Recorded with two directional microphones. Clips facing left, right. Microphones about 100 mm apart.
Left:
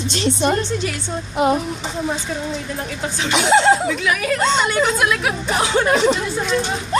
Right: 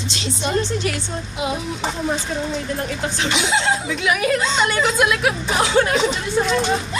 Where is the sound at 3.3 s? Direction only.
50° left (ahead or behind).